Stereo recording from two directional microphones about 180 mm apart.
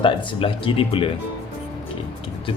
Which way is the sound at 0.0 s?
30° left (ahead or behind).